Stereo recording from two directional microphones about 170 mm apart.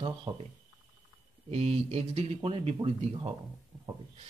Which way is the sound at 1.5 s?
35° right (ahead or behind).